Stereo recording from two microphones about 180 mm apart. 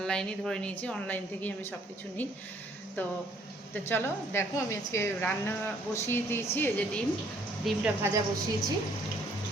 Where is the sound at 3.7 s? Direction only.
10° left (ahead or behind).